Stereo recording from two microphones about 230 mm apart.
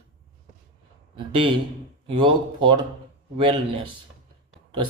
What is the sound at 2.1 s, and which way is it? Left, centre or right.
Speech, right.